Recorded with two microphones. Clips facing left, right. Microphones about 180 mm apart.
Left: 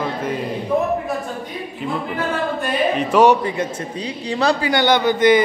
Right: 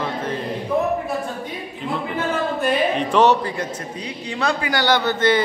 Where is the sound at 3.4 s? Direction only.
20° left (ahead or behind).